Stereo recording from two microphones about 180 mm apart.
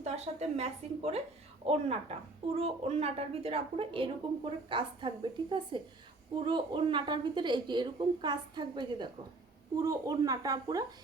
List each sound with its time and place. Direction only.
0.0 s a woman's voice: 35° right (ahead or behind); by 10.8 s 20° right (ahead or behind)